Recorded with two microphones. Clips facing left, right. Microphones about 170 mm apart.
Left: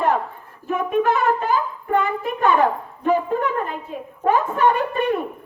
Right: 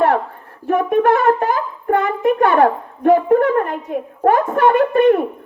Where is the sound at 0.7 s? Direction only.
65° right (ahead or behind).